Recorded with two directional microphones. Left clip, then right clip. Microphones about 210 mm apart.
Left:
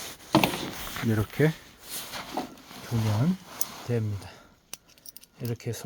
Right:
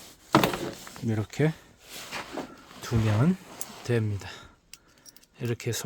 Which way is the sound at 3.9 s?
30° right (ahead or behind).